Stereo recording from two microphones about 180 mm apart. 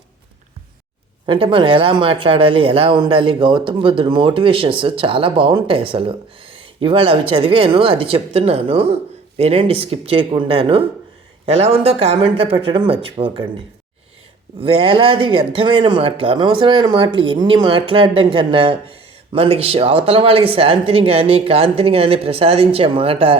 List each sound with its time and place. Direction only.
1.3 s speech: 30° right (ahead or behind)
14.6 s speech: 30° right (ahead or behind)